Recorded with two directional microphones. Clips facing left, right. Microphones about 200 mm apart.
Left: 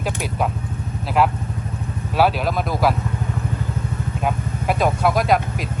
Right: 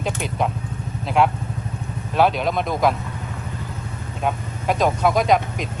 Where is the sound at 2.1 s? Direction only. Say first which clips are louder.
Even; 5° left (ahead or behind).